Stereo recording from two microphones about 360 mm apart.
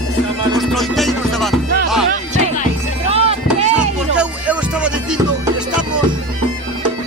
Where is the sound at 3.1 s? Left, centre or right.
Centre.